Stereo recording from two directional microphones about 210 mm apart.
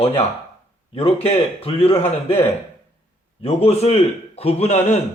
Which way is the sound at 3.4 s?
30° left (ahead or behind).